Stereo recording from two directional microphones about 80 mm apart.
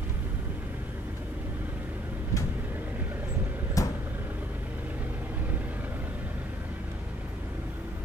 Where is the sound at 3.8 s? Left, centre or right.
Left.